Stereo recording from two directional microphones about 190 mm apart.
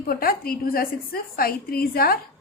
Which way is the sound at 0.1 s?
50° left (ahead or behind).